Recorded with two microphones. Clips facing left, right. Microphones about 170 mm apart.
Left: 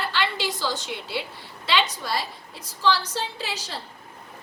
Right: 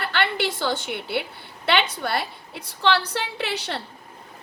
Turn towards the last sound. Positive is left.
turn(degrees=-65)  # may be behind; listen again after turning